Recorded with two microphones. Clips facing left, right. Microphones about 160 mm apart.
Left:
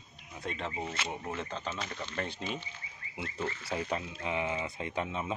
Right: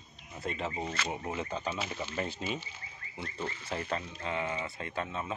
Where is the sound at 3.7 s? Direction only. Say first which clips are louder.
Even; 10° left (ahead or behind).